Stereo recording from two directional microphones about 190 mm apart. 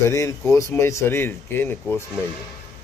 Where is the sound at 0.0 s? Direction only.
15° left (ahead or behind).